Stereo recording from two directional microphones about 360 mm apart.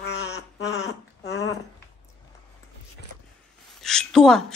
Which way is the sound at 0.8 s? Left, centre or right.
Centre.